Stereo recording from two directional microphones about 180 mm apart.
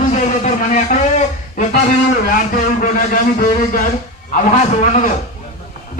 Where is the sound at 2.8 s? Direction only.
50° left (ahead or behind).